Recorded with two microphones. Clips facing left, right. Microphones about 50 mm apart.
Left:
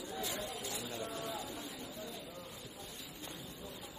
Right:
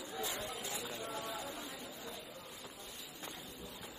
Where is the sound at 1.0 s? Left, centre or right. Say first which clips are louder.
Left 1 dB; right.